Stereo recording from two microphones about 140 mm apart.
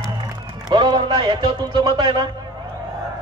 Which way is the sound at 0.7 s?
30° right (ahead or behind).